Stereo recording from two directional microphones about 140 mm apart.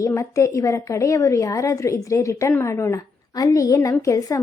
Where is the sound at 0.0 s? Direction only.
25° left (ahead or behind).